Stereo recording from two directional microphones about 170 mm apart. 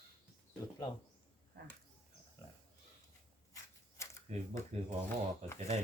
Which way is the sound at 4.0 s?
15° left (ahead or behind).